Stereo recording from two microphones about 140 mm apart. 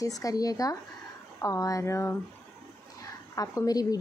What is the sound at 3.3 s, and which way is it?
Speech, 25° left (ahead or behind).